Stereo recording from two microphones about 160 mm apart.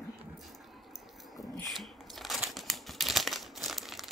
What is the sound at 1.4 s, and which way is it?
Crumpling, centre (ahead or behind).